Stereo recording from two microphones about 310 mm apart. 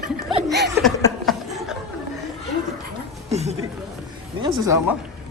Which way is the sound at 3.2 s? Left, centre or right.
Right.